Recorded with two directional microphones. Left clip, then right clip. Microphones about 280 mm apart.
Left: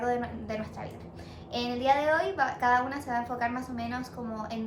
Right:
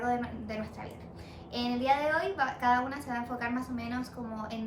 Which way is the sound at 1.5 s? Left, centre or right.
Centre.